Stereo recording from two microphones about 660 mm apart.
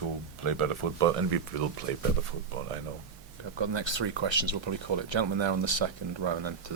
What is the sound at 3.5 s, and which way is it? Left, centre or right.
Speech, right.